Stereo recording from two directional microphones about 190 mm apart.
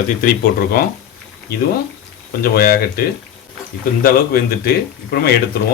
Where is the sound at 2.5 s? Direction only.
55° left (ahead or behind).